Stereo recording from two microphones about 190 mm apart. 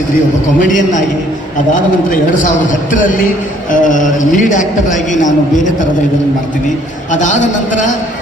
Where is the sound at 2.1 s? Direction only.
45° left (ahead or behind).